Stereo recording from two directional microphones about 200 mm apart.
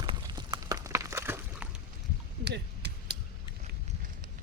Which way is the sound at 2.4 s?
55° right (ahead or behind).